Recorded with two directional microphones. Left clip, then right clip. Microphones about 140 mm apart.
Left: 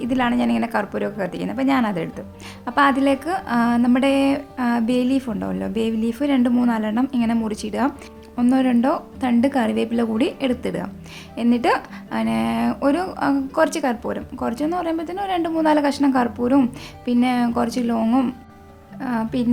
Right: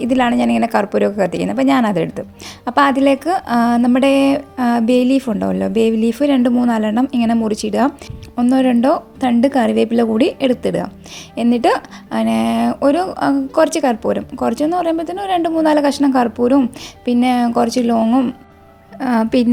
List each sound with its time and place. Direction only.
0.0 s speech: 35° right (ahead or behind)
18.9 s speech: 50° right (ahead or behind)